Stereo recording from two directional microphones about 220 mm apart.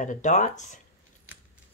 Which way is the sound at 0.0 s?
35° left (ahead or behind).